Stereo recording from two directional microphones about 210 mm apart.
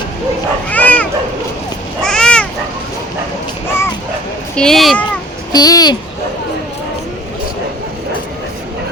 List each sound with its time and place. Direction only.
0.7 s bow-wow: 5° left (ahead or behind)
2.0 s cat: 5° left (ahead or behind)
4.5 s speech: centre (ahead or behind)
5.5 s speech: 20° left (ahead or behind)